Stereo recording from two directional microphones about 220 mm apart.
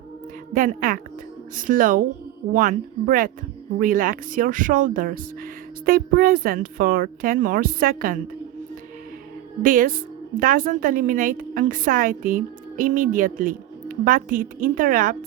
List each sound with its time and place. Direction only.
0.5 s a woman's voice: 40° right (ahead or behind)
9.6 s a woman's voice: 40° right (ahead or behind)